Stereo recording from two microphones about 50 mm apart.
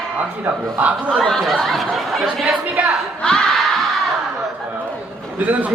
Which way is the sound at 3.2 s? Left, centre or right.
Centre.